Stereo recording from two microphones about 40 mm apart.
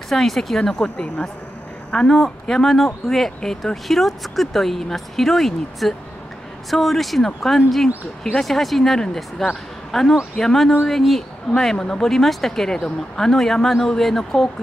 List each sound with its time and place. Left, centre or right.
0.1 s speech: centre
0.6 s speech: centre
2.0 s speech: centre
3.7 s speech: centre